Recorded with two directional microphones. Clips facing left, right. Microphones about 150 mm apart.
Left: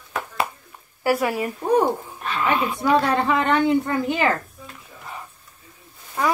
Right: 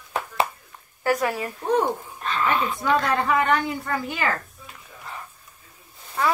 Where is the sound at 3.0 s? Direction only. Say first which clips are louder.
Left 2 dB; 30° left (ahead or behind).